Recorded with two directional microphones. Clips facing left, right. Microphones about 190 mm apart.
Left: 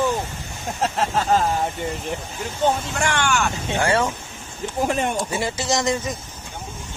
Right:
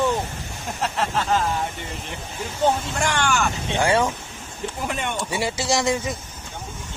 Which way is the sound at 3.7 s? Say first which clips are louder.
Right 1 dB; 15° right (ahead or behind).